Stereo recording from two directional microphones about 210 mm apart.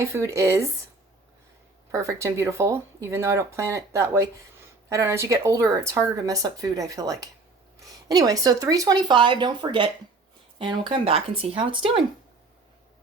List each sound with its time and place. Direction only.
0.0 s speech: 15° right (ahead or behind)
1.9 s speech: 15° right (ahead or behind)